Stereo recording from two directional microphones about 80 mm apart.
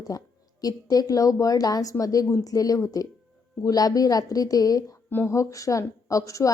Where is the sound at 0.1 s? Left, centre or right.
Left.